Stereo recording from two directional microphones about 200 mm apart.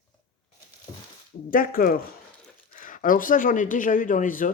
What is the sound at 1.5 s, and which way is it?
Speech, 45° left (ahead or behind).